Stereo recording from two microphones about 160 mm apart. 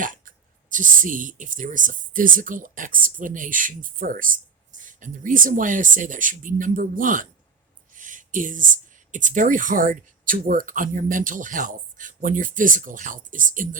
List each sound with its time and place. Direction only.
0.0 s speech: 55° right (ahead or behind)